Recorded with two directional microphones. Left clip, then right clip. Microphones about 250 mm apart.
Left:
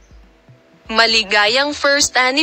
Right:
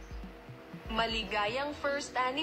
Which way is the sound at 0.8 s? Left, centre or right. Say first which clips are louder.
Left 19 dB; left.